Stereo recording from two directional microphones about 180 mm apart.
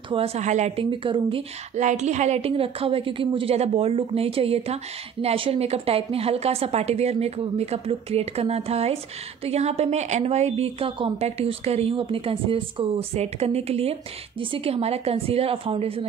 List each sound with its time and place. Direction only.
0.1 s a woman's voice: 35° right (ahead or behind)
0.8 s speech: 25° right (ahead or behind)
1.8 s a woman's voice: 40° right (ahead or behind)